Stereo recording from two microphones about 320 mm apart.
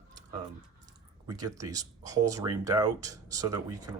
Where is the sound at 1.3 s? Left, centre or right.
Centre.